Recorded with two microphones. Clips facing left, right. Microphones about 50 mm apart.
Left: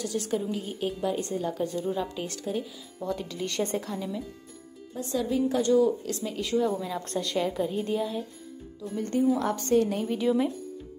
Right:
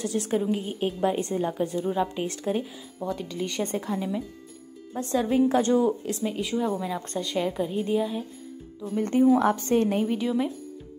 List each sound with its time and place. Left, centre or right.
0.0 s a woman's voice: right
2.4 s a woman's voice: right
3.0 s a woman's voice: centre
3.8 s a woman's voice: centre
4.9 s a woman's voice: right
6.4 s a woman's voice: centre
9.1 s a woman's voice: right
10.1 s a woman's voice: centre